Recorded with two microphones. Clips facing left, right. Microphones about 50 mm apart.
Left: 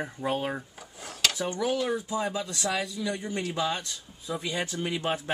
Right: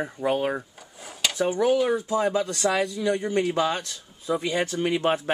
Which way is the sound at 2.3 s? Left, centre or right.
Right.